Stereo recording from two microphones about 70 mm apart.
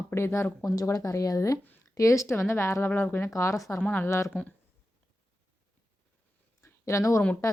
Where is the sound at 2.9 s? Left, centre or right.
Left.